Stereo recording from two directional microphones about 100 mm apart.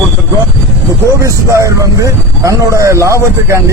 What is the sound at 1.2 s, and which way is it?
Speech, 30° right (ahead or behind).